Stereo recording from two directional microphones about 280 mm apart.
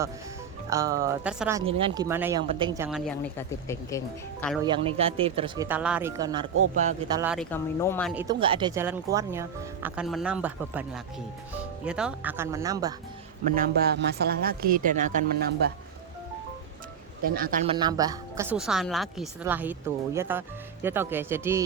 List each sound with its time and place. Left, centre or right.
0.7 s speech: centre
1.6 s speech: centre
2.0 s speech: centre
3.1 s speech: centre
4.6 s speech: centre
5.6 s speech: centre
7.5 s speech: centre
8.1 s speech: centre
13.5 s speech: right
17.2 s speech: right
17.7 s speech: centre